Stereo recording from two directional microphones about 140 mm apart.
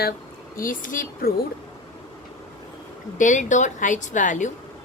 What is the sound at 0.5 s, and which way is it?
Speech, 80° left.